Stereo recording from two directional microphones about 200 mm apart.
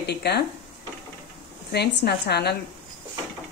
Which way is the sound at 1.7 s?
55° left (ahead or behind).